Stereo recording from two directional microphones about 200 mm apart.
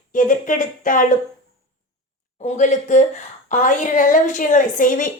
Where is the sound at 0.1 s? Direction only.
40° left (ahead or behind).